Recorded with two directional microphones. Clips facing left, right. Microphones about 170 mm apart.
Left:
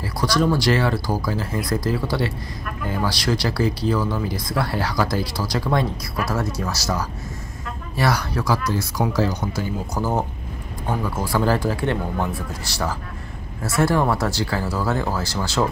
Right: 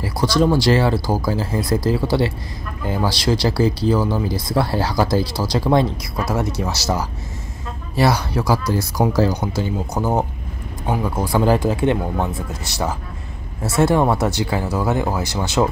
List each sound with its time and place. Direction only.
0.0 s speech: 25° right (ahead or behind)